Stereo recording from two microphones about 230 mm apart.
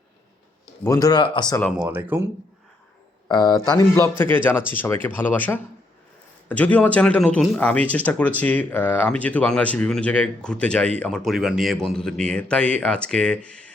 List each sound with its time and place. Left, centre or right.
0.9 s speech: centre
1.6 s speech: centre
3.2 s speech: centre